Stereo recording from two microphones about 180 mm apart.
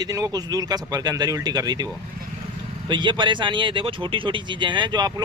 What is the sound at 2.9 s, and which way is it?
A man's voice, 25° right (ahead or behind).